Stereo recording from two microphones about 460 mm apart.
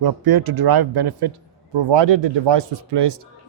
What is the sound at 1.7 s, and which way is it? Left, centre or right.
Speech, right.